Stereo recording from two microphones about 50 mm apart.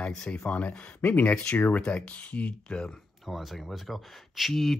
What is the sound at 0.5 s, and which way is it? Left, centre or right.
Speech, left.